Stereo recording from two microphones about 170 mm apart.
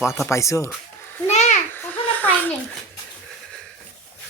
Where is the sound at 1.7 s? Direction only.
10° left (ahead or behind).